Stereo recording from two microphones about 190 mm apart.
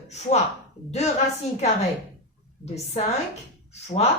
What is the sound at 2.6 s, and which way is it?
A woman's voice, 35° left (ahead or behind).